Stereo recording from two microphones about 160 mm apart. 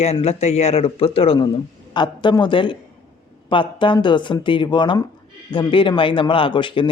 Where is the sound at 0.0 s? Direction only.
40° left (ahead or behind).